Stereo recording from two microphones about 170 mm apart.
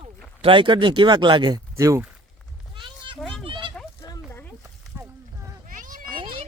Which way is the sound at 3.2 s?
Centre (ahead or behind).